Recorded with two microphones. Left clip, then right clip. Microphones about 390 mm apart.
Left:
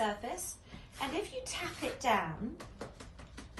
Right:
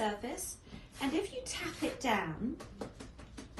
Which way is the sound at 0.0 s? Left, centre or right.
Centre.